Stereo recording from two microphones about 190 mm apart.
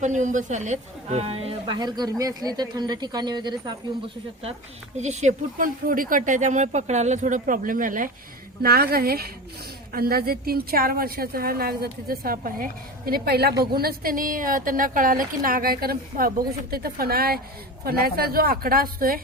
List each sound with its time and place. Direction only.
0.0 s speech: 40° right (ahead or behind); by 3.8 s 25° right (ahead or behind)
4.9 s a woman's voice: 35° right (ahead or behind)